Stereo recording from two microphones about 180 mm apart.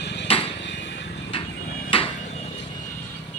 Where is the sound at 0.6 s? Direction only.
80° left.